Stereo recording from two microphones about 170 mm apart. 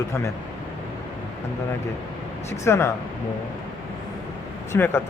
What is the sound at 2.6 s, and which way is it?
Speech, 15° left (ahead or behind).